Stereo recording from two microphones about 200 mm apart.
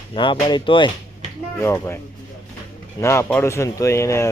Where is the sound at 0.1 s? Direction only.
25° left (ahead or behind).